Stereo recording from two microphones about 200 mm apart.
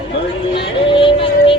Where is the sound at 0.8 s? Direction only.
25° left (ahead or behind).